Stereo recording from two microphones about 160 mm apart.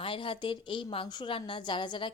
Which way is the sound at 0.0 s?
35° left (ahead or behind).